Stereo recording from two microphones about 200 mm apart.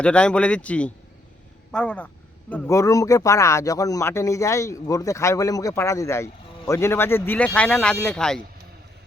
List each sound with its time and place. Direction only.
0.0 s speech: 5° left (ahead or behind)